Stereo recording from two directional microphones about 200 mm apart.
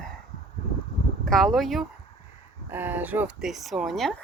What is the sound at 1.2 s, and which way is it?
Speech, centre (ahead or behind).